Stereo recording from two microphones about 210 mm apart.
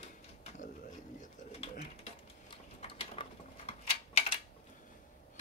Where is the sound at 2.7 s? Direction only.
25° left (ahead or behind).